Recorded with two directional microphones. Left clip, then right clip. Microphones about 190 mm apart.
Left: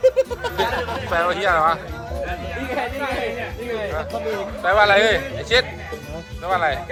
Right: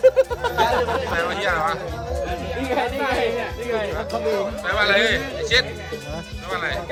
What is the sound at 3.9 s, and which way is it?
Speech, centre (ahead or behind).